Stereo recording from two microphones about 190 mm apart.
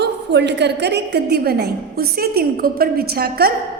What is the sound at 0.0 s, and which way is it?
A woman's voice, 65° right (ahead or behind).